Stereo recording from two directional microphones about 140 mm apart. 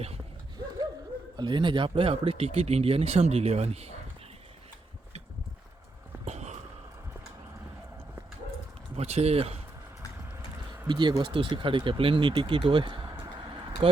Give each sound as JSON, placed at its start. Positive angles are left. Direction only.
{"t": 1.4, "sound": "speech", "side_deg": -35}
{"t": 6.2, "sound": "sniff", "side_deg": -55}
{"t": 9.0, "sound": "speech", "side_deg": -50}
{"t": 10.8, "sound": "speech", "side_deg": -30}